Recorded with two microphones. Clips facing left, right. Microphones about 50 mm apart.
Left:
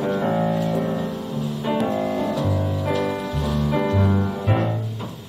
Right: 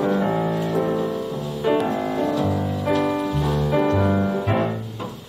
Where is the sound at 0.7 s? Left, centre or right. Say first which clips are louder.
Right 2 dB; right.